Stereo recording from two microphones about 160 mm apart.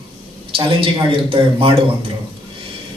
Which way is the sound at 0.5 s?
35° right (ahead or behind).